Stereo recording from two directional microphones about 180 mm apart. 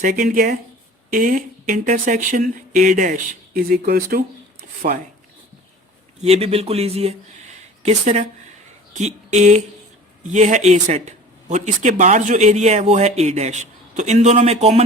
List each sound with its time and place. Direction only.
0.0 s speech: 50° right (ahead or behind)
6.2 s speech: 35° right (ahead or behind)